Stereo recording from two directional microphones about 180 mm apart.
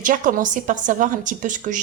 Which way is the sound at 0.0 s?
50° right (ahead or behind).